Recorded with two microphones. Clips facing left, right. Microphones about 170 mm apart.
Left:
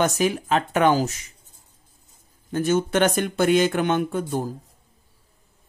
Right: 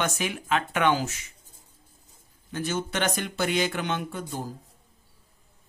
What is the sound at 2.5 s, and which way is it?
Speech, 50° left (ahead or behind).